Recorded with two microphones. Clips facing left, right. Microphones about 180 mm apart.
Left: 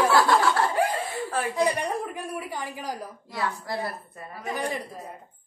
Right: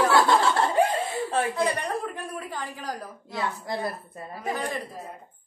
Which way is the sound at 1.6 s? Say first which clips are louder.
Left 1 dB; 15° left (ahead or behind).